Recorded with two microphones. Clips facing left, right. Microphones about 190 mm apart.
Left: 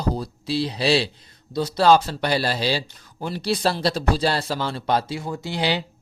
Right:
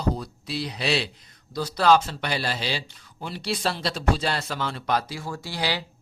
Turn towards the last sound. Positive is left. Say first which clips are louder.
# left 5 dB
turn(degrees=25)  # may be behind; listen again after turning